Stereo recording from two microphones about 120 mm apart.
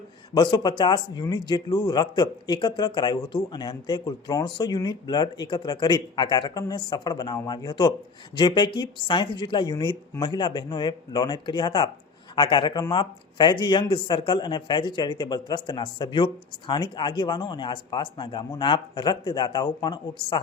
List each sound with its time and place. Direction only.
0.3 s speech: 35° left (ahead or behind)